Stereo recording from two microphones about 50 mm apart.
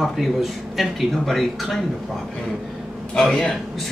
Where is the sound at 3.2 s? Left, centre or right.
Centre.